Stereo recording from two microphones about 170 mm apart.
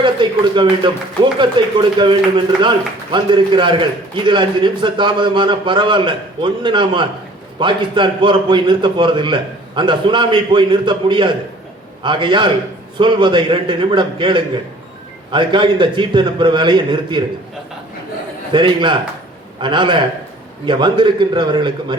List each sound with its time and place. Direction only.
0.0 s a man's voice: 30° right (ahead or behind)
18.5 s a man's voice: 30° right (ahead or behind)